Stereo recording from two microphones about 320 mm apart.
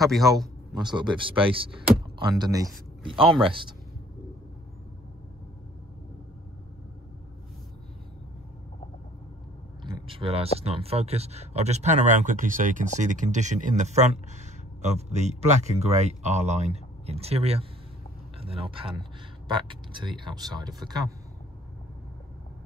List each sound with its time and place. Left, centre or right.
0.0 s speech: centre
0.8 s speech: centre
9.8 s speech: centre